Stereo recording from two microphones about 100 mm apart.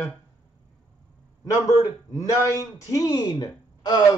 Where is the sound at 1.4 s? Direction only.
35° left (ahead or behind).